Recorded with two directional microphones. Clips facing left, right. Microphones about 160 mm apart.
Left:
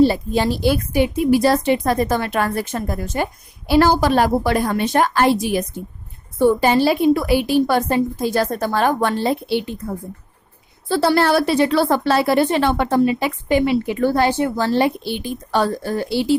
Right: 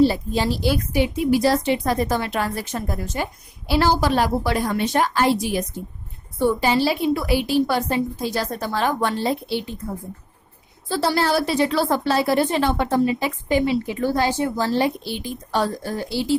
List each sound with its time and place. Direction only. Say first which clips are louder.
0.0 s a woman's voice: left 3 dB; 55° left (ahead or behind)
10.8 s a woman's voice: left 5 dB; 60° left (ahead or behind)